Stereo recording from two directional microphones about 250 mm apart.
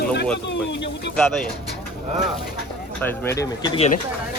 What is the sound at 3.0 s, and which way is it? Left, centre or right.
Speech, centre.